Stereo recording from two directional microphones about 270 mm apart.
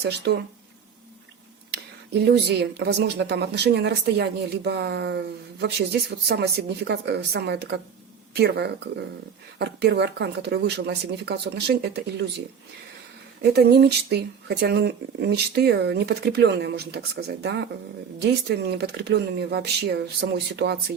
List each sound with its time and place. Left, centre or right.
0.3 s speech: right
2.2 s speech: right
13.4 s speech: right